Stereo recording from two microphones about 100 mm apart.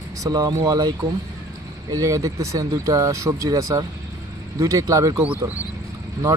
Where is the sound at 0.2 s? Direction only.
40° right (ahead or behind).